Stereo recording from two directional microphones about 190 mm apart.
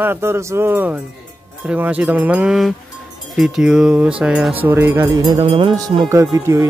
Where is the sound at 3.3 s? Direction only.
Centre (ahead or behind).